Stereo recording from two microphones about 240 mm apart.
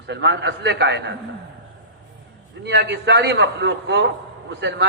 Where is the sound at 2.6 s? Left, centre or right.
Right.